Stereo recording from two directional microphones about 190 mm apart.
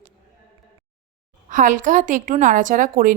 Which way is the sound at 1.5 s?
45° right (ahead or behind).